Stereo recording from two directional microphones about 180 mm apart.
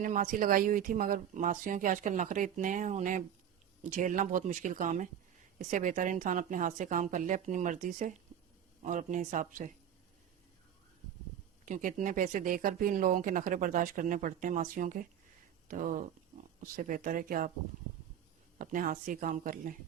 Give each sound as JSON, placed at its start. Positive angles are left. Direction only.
{"t": 0.0, "sound": "speech", "side_deg": -50}
{"t": 11.6, "sound": "speech", "side_deg": -45}
{"t": 18.6, "sound": "speech", "side_deg": -50}